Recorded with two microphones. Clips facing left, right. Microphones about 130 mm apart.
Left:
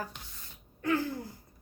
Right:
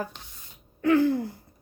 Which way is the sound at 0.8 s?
65° right (ahead or behind).